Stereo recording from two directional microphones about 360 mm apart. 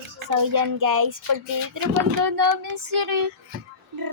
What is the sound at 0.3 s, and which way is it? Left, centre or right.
Child singing, right.